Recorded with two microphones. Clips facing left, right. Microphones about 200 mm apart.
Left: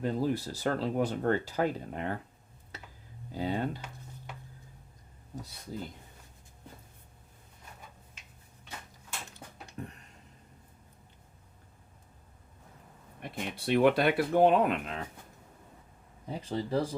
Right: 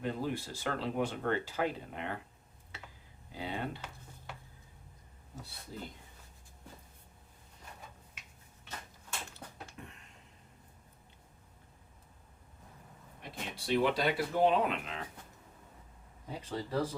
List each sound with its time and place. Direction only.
0.0 s speech: 40° left (ahead or behind)
3.3 s speech: 40° left (ahead or behind)
5.7 s speech: 45° left (ahead or behind)
9.7 s a sound: 40° left (ahead or behind)
13.2 s speech: 60° left (ahead or behind)
16.4 s speech: 30° left (ahead or behind)